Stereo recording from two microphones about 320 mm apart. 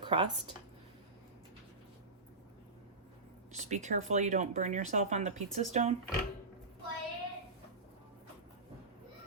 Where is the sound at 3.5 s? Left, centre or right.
Right.